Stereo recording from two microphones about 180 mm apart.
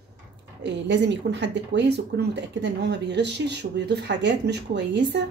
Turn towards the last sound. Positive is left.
turn(degrees=-75)  # may be behind; listen again after turning